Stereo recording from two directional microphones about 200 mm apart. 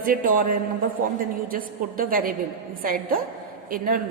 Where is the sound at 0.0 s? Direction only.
45° right (ahead or behind).